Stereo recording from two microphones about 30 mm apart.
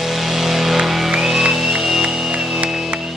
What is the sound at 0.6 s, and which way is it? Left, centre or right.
Music, centre.